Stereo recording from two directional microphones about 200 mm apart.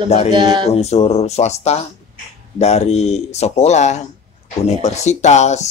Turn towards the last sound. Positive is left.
turn(degrees=35)  # may be behind; listen again after turning